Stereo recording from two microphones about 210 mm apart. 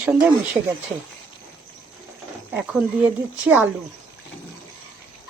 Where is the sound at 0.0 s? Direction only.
10° right (ahead or behind).